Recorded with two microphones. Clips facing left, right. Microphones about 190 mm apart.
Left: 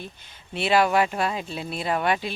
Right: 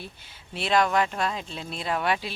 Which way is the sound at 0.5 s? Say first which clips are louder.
Left 3 dB; 5° left (ahead or behind).